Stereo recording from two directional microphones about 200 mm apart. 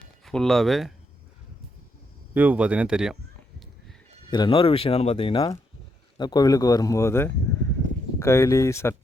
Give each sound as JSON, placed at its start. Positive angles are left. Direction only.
{"t": 0.3, "sound": "speech", "side_deg": 0}
{"t": 2.3, "sound": "speech", "side_deg": -10}
{"t": 4.3, "sound": "speech", "side_deg": 25}